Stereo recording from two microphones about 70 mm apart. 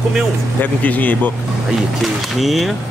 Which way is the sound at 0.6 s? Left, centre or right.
Left.